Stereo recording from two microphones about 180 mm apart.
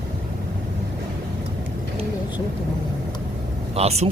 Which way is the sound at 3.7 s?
35° right (ahead or behind).